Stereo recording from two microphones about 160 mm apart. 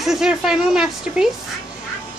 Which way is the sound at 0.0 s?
5° right (ahead or behind).